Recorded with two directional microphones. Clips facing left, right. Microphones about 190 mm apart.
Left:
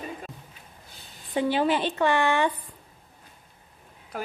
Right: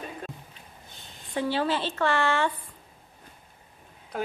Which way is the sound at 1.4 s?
15° left (ahead or behind).